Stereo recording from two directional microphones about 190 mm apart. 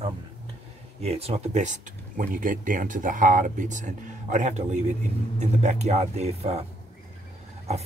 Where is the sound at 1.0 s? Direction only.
35° right (ahead or behind).